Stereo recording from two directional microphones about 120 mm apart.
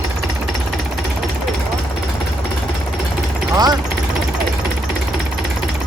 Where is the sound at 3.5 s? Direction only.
35° right (ahead or behind).